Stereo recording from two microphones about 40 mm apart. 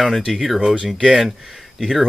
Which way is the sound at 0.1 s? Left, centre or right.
Centre.